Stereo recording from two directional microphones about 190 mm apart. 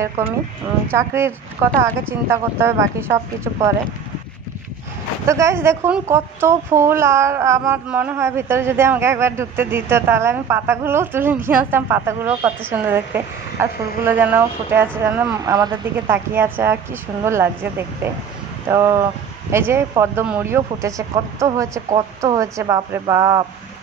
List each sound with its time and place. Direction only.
0.9 s a woman's voice: 15° right (ahead or behind)
5.3 s a woman's voice: 15° right (ahead or behind)